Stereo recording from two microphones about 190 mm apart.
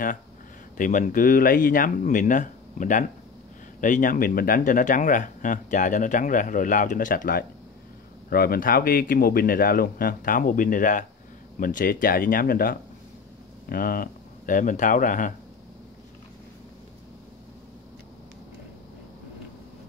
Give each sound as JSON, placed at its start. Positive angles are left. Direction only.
{"t": 0.7, "sound": "speech", "side_deg": 45}